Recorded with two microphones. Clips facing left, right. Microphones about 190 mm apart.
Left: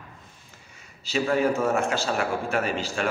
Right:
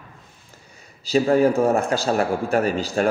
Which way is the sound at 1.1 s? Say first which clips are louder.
Right 6 dB; 35° right (ahead or behind).